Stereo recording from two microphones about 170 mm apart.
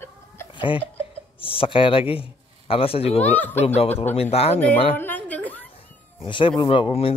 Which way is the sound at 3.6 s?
35° left (ahead or behind).